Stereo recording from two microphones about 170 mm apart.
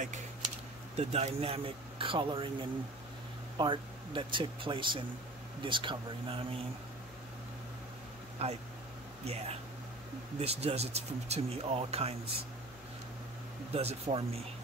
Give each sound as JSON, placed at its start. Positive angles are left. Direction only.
{"t": 0.9, "sound": "speech", "side_deg": -35}
{"t": 8.4, "sound": "speech", "side_deg": -35}
{"t": 13.7, "sound": "speech", "side_deg": -35}